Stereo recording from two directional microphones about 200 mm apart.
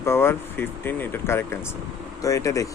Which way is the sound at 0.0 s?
10° left (ahead or behind).